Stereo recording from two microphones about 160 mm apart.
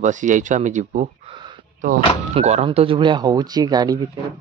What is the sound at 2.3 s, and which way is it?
Speech, 40° right (ahead or behind).